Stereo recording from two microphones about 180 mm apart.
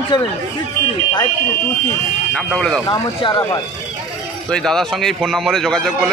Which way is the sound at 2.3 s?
5° left (ahead or behind).